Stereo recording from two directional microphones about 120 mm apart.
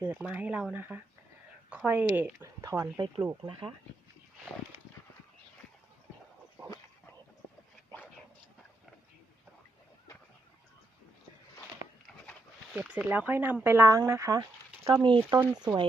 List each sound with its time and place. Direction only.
0.0 s speech: 15° right (ahead or behind)
2.6 s speech: 30° right (ahead or behind)
3.4 s speech: 45° right (ahead or behind)
12.0 s dog: 10° left (ahead or behind)
12.8 s speech: 5° right (ahead or behind)
13.1 s speech: 15° right (ahead or behind)
15.0 s speech: 40° right (ahead or behind)